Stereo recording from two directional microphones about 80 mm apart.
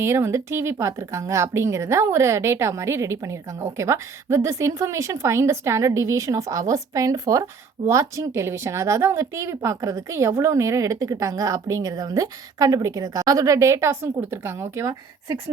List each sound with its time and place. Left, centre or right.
0.0 s speech: right